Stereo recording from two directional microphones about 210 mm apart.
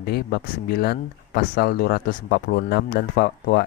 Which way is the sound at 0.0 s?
45° left (ahead or behind).